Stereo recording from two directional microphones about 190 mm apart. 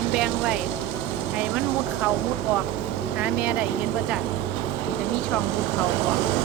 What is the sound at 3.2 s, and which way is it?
Speech, 5° right (ahead or behind).